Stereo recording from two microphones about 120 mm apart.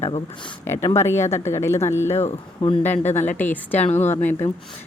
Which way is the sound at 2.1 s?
65° left (ahead or behind).